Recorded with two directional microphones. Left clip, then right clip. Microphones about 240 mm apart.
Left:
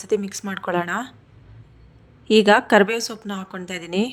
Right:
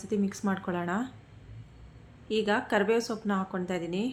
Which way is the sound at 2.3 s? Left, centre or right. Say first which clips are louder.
Left 13 dB; left.